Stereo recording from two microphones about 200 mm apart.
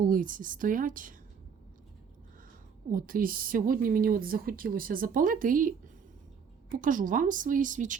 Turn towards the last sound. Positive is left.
turn(degrees=-40)  # may be behind; listen again after turning